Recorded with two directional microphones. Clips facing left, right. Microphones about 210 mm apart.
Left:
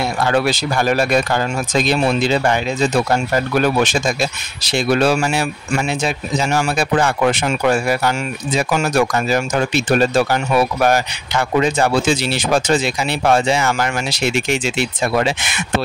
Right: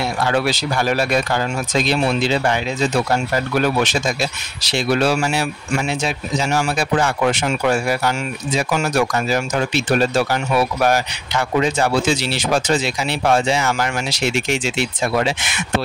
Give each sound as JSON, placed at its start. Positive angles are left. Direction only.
{"t": 0.2, "sound": "speech", "side_deg": 50}